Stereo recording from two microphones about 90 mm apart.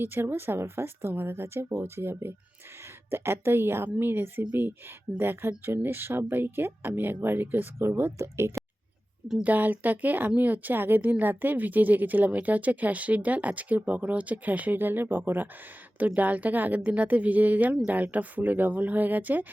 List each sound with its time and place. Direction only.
0.0 s speech: 25° right (ahead or behind)
9.4 s a woman's voice: 20° right (ahead or behind)